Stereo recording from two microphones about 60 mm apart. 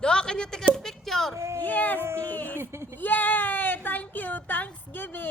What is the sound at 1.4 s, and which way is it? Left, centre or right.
Speech, right.